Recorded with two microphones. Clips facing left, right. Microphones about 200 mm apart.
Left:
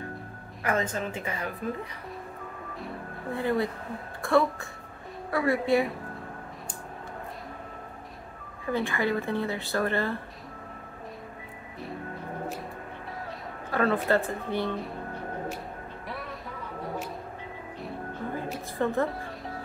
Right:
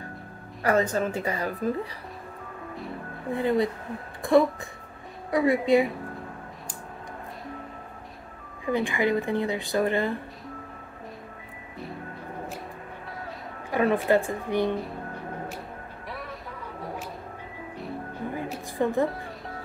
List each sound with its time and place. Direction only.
0.6 s speech: 35° right (ahead or behind)
2.7 s music: centre (ahead or behind)
3.3 s a woman's voice: 20° right (ahead or behind)
8.6 s speech: 15° right (ahead or behind)
13.7 s speech: 15° right (ahead or behind)
16.1 s vehicle: centre (ahead or behind)
18.3 s music: 15° right (ahead or behind)
19.0 s music: centre (ahead or behind)